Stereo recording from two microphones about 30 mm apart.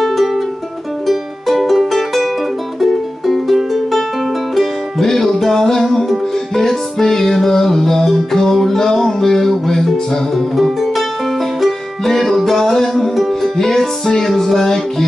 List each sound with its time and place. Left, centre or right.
0.0 s music: centre
5.5 s music: centre
10.3 s music: centre
12.0 s music: centre